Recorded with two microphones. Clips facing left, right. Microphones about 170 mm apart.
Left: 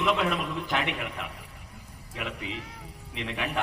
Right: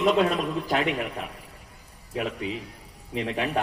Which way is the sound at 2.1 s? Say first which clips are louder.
Right 6 dB; 40° right (ahead or behind).